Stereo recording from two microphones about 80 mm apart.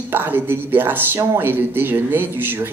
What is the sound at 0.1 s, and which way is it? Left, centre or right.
Speech, right.